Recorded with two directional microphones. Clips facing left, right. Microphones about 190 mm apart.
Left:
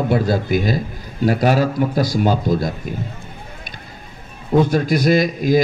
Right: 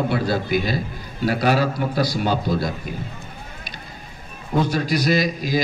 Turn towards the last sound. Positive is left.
turn(degrees=50)  # may be behind; listen again after turning